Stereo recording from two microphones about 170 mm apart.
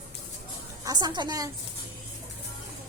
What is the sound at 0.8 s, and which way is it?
Speech, 25° right (ahead or behind).